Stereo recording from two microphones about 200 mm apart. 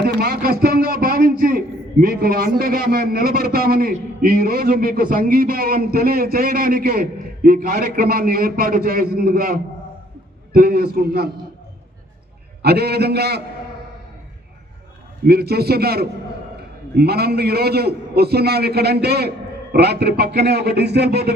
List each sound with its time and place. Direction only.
0.0 s a sound: 50° right (ahead or behind)
2.6 s a man's voice: 45° right (ahead or behind)
12.6 s a man's voice: 55° right (ahead or behind)
15.3 s a man's voice: 50° right (ahead or behind)